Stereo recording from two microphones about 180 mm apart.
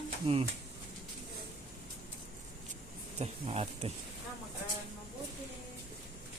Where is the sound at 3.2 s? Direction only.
35° right (ahead or behind).